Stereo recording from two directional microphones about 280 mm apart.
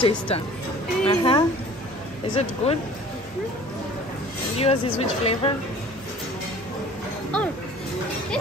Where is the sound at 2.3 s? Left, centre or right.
Left.